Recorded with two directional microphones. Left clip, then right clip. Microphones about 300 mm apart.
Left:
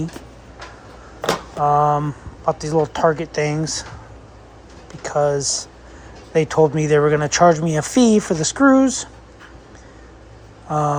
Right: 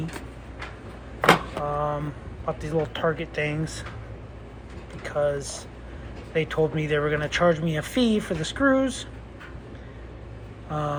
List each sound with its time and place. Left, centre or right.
1.6 s speech: left
5.0 s speech: left
10.7 s speech: left